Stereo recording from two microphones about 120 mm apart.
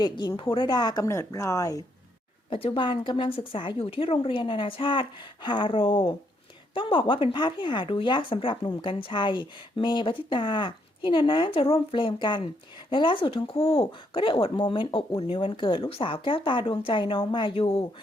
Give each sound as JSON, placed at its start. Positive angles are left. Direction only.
{"t": 0.0, "sound": "a woman's voice", "side_deg": 40}
{"t": 1.0, "sound": "speech", "side_deg": 25}
{"t": 2.5, "sound": "speech", "side_deg": 50}